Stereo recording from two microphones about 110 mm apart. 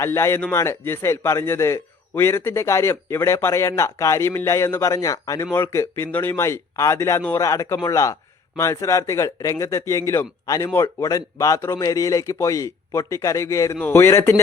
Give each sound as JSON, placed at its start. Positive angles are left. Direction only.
{"t": 0.0, "sound": "a man's voice", "side_deg": 25}